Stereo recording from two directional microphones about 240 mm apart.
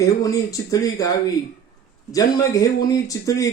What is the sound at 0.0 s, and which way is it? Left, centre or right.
Speech, centre.